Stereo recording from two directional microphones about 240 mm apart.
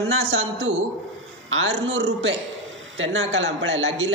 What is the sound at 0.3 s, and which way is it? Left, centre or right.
A man's voice, right.